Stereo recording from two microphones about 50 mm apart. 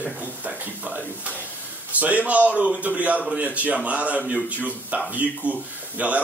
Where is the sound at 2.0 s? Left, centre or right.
Right.